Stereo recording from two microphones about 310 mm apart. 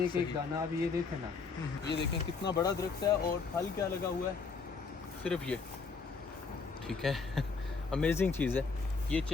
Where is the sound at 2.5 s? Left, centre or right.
Centre.